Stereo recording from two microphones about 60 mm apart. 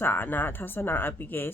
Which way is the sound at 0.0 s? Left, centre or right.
Left.